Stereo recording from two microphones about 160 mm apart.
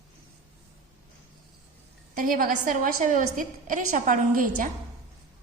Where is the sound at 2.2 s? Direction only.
55° right (ahead or behind).